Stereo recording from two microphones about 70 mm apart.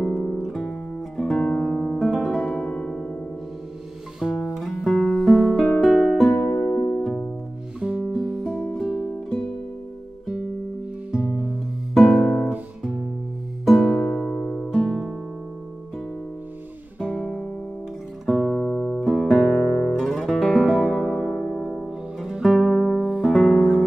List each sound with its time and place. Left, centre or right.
0.0 s music: centre
2.5 s piano: centre
4.2 s music: centre
7.8 s music: centre
11.2 s music: centre
12.4 s guitar: centre
13.7 s music: centre
17.1 s guitar: centre
18.2 s guitar: centre
18.7 s music: left
19.0 s music: centre
22.2 s music: centre